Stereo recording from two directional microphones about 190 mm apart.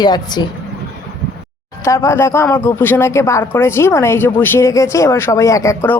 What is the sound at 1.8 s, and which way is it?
Speech, 15° left (ahead or behind).